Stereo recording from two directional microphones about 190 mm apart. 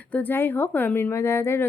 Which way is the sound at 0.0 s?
10° left (ahead or behind).